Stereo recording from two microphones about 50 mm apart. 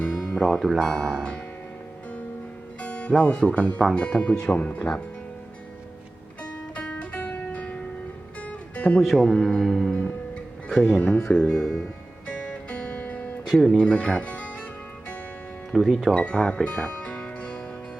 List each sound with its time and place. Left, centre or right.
0.0 s music: centre
0.4 s speech: centre
2.8 s music: left
3.2 s speech: left
6.4 s music: left
9.0 s speech: centre
9.9 s music: left
10.8 s speech: centre
12.3 s music: left
13.5 s speech: centre
13.8 s speech: left
15.7 s speech: centre
16.1 s speech: centre